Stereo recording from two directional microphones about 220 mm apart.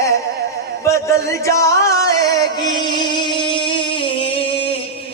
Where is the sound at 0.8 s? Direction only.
15° left (ahead or behind).